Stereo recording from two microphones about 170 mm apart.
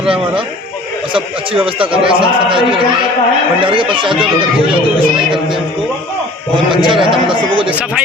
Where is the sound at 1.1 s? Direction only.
30° right (ahead or behind).